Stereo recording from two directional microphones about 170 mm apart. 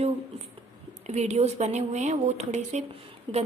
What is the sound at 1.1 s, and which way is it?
Speech, 40° right (ahead or behind).